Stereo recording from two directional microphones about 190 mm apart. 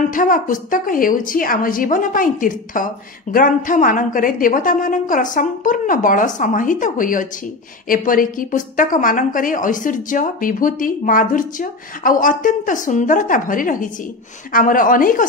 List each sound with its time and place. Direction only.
0.1 s a woman's voice: 45° left (ahead or behind)